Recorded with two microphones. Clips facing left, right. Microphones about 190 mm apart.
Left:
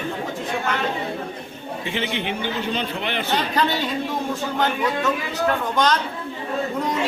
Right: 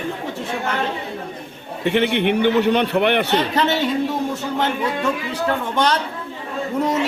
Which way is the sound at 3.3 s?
25° right (ahead or behind).